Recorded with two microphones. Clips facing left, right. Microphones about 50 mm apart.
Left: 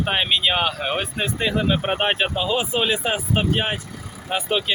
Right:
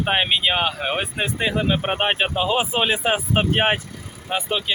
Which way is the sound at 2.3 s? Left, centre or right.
Right.